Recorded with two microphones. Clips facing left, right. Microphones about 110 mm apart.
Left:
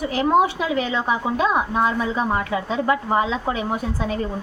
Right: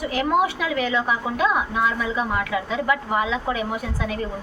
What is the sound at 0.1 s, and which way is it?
A woman's voice, 30° left (ahead or behind).